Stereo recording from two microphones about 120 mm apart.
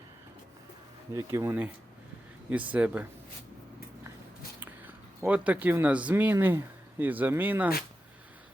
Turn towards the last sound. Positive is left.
turn(degrees=-15)  # may be behind; listen again after turning